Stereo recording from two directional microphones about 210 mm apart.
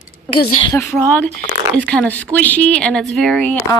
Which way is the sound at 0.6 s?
20° left (ahead or behind).